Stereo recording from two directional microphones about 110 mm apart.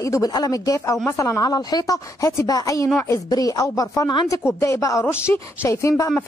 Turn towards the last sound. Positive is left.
turn(degrees=30)  # may be behind; listen again after turning